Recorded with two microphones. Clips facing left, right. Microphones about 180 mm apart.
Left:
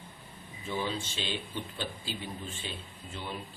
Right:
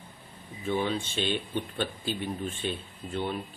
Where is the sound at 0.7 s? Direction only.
60° right (ahead or behind).